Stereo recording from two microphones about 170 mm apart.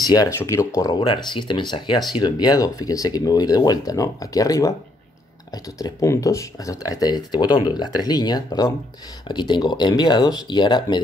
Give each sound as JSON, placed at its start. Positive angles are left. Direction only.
{"t": 0.0, "sound": "speech", "side_deg": 20}